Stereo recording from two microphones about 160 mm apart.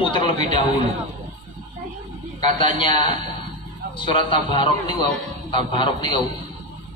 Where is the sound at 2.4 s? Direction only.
30° left (ahead or behind).